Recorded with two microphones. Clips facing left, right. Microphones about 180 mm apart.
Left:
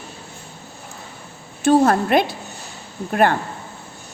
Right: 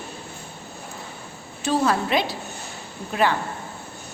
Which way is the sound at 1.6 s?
50° left (ahead or behind).